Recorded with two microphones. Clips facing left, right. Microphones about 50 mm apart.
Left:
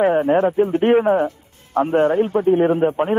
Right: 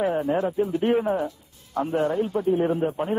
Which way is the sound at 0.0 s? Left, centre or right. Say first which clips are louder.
Left 8 dB; left.